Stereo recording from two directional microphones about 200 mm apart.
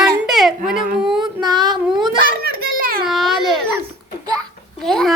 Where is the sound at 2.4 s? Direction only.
45° right (ahead or behind).